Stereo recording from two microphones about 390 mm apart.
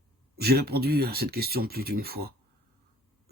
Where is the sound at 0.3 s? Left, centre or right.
Right.